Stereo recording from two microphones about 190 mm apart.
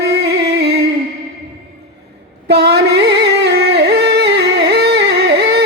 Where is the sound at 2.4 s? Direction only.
60° right (ahead or behind).